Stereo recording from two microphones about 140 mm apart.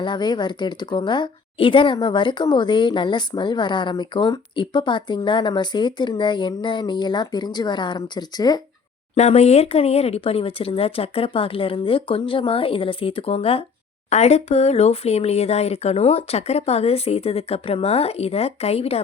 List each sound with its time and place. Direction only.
0.0 s a woman's voice: 35° left (ahead or behind)
9.1 s a woman's voice: 50° left (ahead or behind)